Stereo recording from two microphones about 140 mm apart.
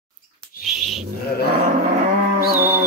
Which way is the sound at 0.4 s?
Centre (ahead or behind).